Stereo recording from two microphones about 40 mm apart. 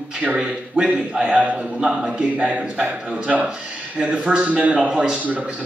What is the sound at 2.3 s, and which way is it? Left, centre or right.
Speech, right.